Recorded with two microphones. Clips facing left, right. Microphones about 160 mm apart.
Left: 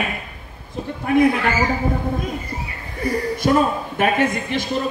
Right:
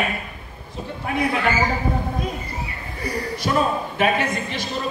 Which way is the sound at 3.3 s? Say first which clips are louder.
Left 3 dB; 50° left (ahead or behind).